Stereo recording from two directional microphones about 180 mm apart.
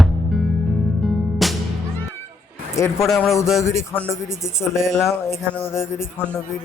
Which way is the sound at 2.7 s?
15° left (ahead or behind).